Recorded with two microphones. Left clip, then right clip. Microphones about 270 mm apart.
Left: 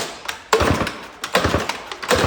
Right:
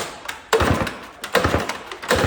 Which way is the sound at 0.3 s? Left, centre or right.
Centre.